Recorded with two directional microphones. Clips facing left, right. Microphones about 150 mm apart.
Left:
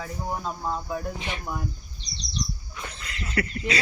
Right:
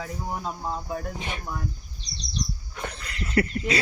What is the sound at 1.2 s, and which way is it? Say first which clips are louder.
Speech: even; 45° right (ahead or behind).